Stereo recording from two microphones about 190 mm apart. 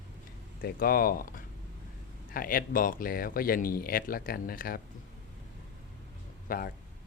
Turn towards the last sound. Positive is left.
turn(degrees=50)  # may be behind; listen again after turning